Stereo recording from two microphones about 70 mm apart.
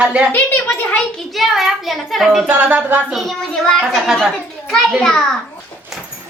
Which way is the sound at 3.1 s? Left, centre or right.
Centre.